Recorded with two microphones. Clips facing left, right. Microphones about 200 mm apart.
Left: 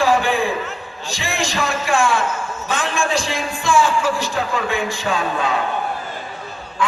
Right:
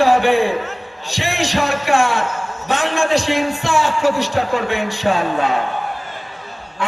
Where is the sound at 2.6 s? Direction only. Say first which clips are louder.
Right 4 dB; 65° right (ahead or behind).